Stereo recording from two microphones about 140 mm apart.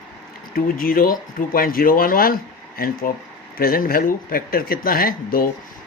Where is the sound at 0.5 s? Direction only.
90° left.